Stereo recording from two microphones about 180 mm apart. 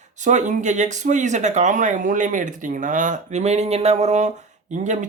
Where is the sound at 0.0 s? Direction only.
40° right (ahead or behind).